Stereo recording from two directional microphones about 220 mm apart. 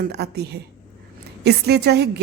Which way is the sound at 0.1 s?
50° right (ahead or behind).